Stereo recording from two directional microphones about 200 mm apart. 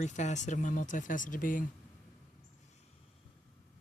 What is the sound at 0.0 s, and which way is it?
Speech, 35° left (ahead or behind).